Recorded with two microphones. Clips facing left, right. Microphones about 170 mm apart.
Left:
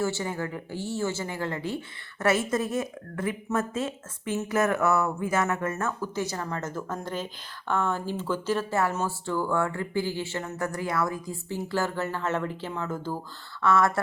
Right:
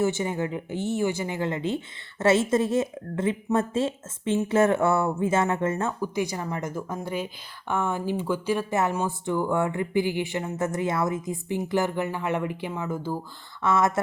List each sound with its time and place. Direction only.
0.0 s speech: 20° right (ahead or behind)
6.0 s speech: 15° right (ahead or behind)